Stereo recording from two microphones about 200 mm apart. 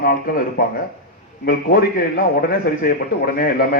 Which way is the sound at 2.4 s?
50° left (ahead or behind).